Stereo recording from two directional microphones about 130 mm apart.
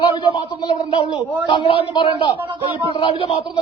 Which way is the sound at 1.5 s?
40° left (ahead or behind).